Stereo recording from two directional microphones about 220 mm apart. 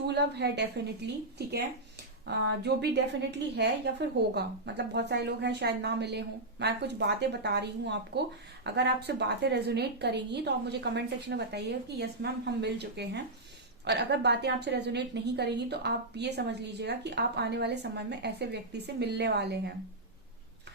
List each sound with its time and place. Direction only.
0.1 s a woman's voice: 50° right (ahead or behind)